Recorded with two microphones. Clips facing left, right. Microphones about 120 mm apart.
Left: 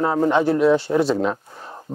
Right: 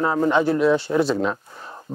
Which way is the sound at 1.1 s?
35° left (ahead or behind).